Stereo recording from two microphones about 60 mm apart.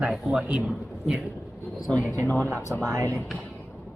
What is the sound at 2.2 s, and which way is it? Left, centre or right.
Speech, left.